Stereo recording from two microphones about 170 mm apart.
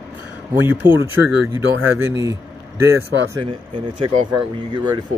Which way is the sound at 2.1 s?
20° right (ahead or behind).